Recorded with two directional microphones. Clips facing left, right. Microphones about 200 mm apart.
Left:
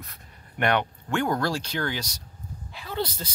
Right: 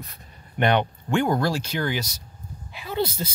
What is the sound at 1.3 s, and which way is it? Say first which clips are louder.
A woman's voice: right 3 dB; 5° right (ahead or behind).